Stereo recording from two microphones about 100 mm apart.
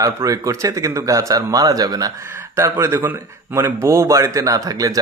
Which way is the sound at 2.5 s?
25° right (ahead or behind).